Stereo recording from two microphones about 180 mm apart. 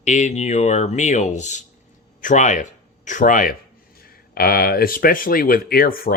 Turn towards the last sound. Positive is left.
turn(degrees=55)  # may be behind; listen again after turning